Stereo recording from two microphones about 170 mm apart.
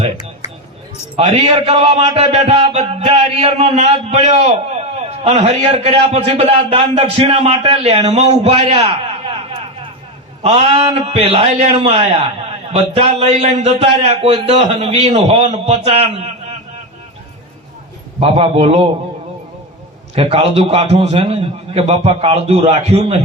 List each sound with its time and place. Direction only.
1.1 s a man's voice: 40° right (ahead or behind)
8.9 s a sound: 30° right (ahead or behind)
10.4 s a man's voice: 35° right (ahead or behind)
18.2 s a man's voice: 35° right (ahead or behind)
20.1 s a man's voice: 35° right (ahead or behind)